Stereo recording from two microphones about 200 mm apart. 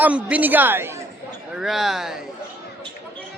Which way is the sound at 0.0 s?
5° right (ahead or behind).